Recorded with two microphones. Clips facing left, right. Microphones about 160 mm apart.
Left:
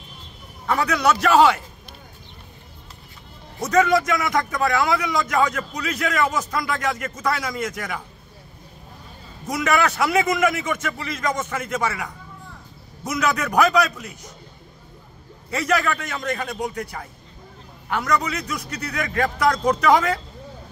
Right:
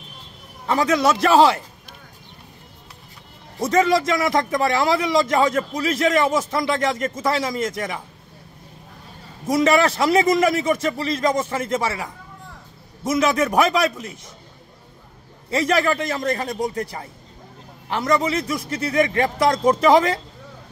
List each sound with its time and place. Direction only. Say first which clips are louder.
0.7 s a man's voice: right 2 dB; 25° right (ahead or behind)
3.6 s a man's voice: right 1 dB; 30° right (ahead or behind)
9.5 s a man's voice: right 4 dB; 30° right (ahead or behind)
13.1 s a man's voice: right 3 dB; 25° right (ahead or behind)
15.5 s a man's voice: right 3 dB; 30° right (ahead or behind)